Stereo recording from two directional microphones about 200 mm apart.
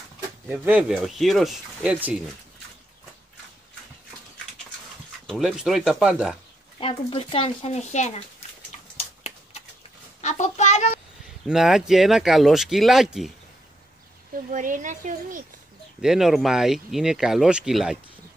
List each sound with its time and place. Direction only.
0.5 s speech: 5° right (ahead or behind)
5.2 s speech: centre (ahead or behind)
6.8 s speech: 25° left (ahead or behind)
8.7 s a sound: 35° left (ahead or behind)
10.2 s a sound: 35° left (ahead or behind)
11.4 s speech: centre (ahead or behind)
14.5 s a woman's voice: 40° right (ahead or behind)
16.0 s speech: centre (ahead or behind)